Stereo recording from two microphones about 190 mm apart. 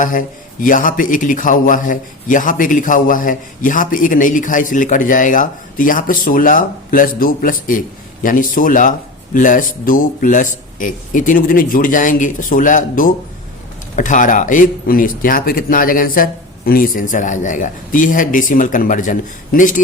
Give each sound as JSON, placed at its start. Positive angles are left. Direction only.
{"t": 0.0, "sound": "a man's voice", "side_deg": 45}